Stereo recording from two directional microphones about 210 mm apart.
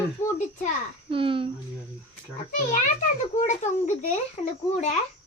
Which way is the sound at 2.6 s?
40° left (ahead or behind).